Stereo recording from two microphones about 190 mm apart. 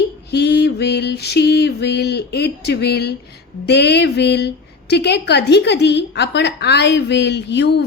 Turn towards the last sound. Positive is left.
turn(degrees=60)  # may be behind; listen again after turning